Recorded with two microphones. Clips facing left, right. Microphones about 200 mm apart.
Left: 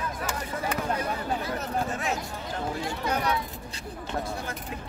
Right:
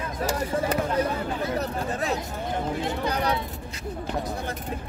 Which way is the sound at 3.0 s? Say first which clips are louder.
Even; 30° right (ahead or behind).